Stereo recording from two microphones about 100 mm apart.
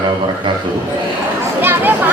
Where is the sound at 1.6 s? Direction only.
20° right (ahead or behind).